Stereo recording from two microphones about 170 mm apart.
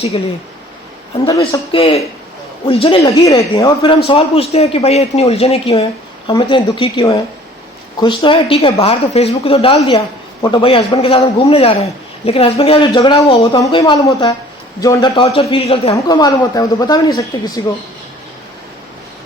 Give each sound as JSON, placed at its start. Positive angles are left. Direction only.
{"t": 1.4, "sound": "a man's voice", "side_deg": 35}
{"t": 3.2, "sound": "speech", "side_deg": 20}
{"t": 3.8, "sound": "a man's voice", "side_deg": 35}
{"t": 15.1, "sound": "a man's voice", "side_deg": 35}
{"t": 16.0, "sound": "speech", "side_deg": 20}